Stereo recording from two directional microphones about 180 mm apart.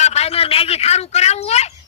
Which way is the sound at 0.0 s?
35° left (ahead or behind).